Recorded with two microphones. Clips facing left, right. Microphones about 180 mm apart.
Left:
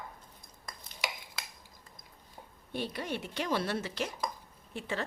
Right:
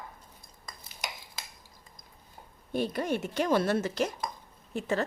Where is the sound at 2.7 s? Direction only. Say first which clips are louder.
Right 7 dB; 45° right (ahead or behind).